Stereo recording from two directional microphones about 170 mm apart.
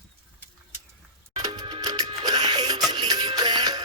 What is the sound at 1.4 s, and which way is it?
Music, 25° right (ahead or behind).